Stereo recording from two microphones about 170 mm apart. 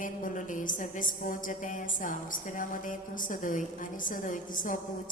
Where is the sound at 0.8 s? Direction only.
50° left (ahead or behind).